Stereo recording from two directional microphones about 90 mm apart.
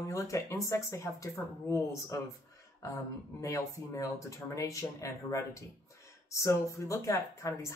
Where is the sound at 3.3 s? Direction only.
35° left (ahead or behind).